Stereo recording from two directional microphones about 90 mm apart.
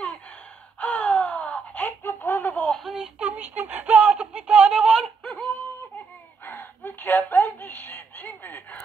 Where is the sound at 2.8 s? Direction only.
5° right (ahead or behind).